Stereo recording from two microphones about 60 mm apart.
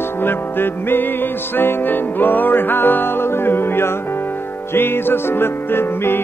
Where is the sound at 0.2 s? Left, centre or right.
Left.